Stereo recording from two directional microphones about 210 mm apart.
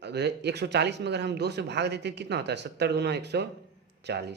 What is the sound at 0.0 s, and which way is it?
A man's voice, 55° right (ahead or behind).